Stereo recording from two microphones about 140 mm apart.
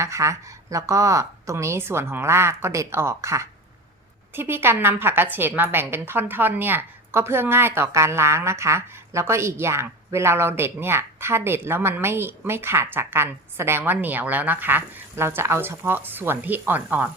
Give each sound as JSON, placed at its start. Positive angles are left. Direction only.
{"t": 0.0, "sound": "a woman's voice", "side_deg": -20}